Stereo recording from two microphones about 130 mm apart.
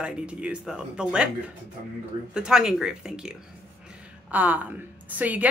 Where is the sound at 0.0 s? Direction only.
10° right (ahead or behind).